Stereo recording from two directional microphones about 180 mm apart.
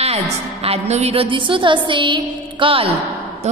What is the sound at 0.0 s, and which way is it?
A woman's voice, 35° right (ahead or behind).